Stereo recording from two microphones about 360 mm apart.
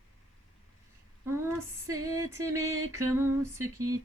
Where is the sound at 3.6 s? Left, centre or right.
Right.